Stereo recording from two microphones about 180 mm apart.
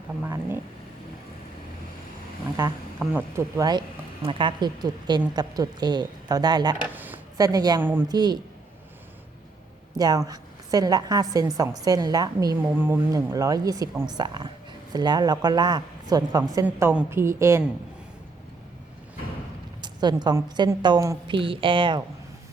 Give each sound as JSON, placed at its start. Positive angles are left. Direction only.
{"t": 0.3, "sound": "a woman's voice", "side_deg": -15}
{"t": 2.6, "sound": "a woman's voice", "side_deg": -15}
{"t": 6.8, "sound": "speech", "side_deg": -10}
{"t": 8.0, "sound": "a woman's voice", "side_deg": -25}
{"t": 10.0, "sound": "a woman's voice", "side_deg": -20}
{"t": 16.6, "sound": "a woman's voice", "side_deg": -5}
{"t": 19.8, "sound": "a woman's voice", "side_deg": -25}